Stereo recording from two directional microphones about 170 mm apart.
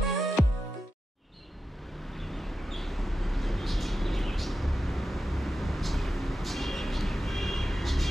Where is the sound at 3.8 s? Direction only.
Centre (ahead or behind).